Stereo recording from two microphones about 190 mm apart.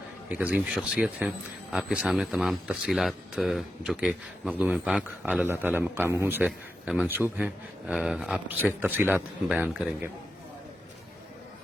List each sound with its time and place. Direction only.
0.3 s a man's voice: 5° right (ahead or behind)